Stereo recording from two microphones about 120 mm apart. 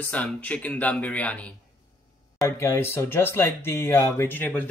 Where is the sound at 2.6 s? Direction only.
20° left (ahead or behind).